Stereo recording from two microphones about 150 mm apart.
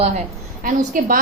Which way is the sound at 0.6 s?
70° right (ahead or behind).